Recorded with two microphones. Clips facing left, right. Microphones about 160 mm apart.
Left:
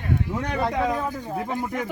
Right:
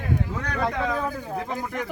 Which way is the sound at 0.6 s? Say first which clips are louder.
Even; 15° left (ahead or behind).